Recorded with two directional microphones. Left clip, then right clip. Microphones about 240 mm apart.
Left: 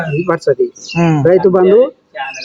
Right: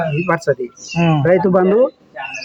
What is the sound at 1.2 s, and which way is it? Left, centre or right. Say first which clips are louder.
Speech: left 4 dB; centre.